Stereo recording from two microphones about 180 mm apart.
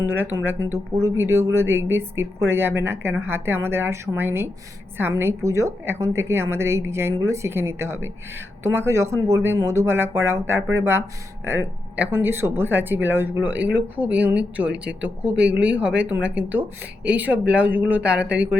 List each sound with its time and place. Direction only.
0.0 s speech: 10° right (ahead or behind)